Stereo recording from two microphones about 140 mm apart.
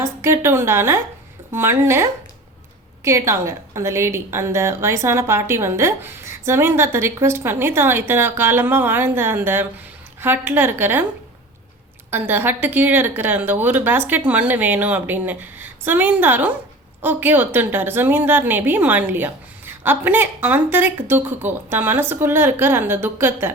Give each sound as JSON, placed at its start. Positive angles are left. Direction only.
{"t": 0.0, "sound": "a woman's voice", "side_deg": -20}
{"t": 12.1, "sound": "a woman's voice", "side_deg": -15}